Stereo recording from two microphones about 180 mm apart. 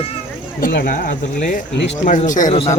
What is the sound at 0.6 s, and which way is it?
Speech, 65° left (ahead or behind).